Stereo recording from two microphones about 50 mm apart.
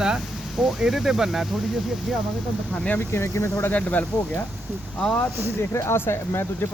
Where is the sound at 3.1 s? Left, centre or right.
Left.